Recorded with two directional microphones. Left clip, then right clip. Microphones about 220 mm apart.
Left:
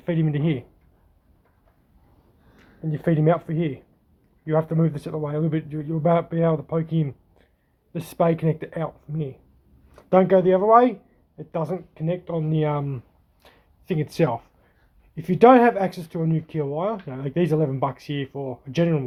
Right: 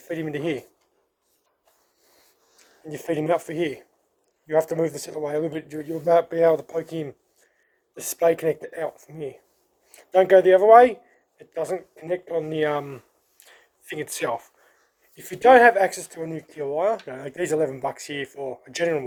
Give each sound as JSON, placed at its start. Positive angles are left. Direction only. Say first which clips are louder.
{"t": 0.1, "sound": "speech", "louder": "left 1 dB", "side_deg": -15}
{"t": 2.9, "sound": "speech", "louder": "left 2 dB", "side_deg": -25}